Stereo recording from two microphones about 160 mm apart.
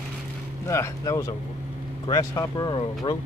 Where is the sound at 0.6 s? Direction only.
20° left (ahead or behind).